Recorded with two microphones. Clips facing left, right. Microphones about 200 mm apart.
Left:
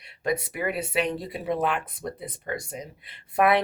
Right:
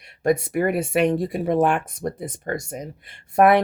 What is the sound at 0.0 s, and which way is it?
Speech, 45° right (ahead or behind).